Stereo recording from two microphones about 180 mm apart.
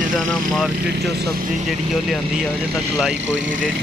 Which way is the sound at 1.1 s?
60° right (ahead or behind).